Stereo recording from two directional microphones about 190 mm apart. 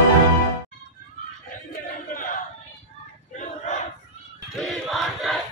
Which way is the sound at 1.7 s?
45° left (ahead or behind).